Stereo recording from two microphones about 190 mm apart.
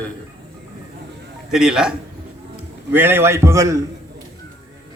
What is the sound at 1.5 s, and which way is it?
Speech, 5° right (ahead or behind).